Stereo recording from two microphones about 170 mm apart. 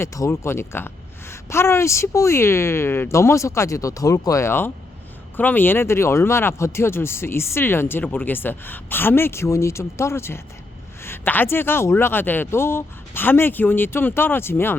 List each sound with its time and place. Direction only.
0.0 s speech: 15° left (ahead or behind)